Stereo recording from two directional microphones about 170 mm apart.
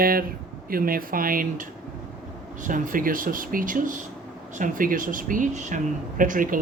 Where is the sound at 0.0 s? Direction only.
60° right (ahead or behind).